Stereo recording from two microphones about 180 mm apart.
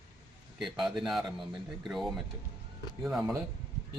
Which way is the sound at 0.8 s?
Centre (ahead or behind).